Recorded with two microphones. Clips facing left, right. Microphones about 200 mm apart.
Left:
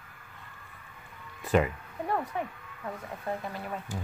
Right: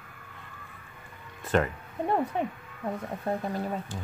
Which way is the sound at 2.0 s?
25° right (ahead or behind).